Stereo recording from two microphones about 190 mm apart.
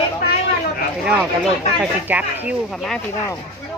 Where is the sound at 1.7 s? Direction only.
5° right (ahead or behind).